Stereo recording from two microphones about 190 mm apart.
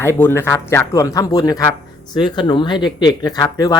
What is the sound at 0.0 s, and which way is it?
Speech, 10° left (ahead or behind).